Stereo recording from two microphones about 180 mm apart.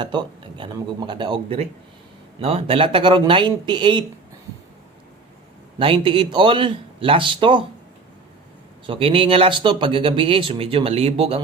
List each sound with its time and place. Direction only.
0.0 s speech: 25° right (ahead or behind)
5.8 s speech: 30° right (ahead or behind)
8.9 s speech: 30° right (ahead or behind)